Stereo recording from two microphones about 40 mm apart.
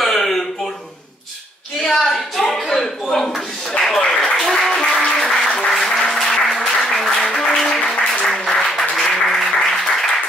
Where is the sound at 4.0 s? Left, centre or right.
Centre.